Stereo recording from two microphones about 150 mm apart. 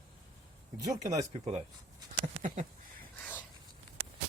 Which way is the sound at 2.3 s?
55° right (ahead or behind).